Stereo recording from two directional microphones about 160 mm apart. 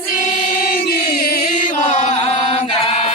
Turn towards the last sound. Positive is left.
turn(degrees=35)  # may be behind; listen again after turning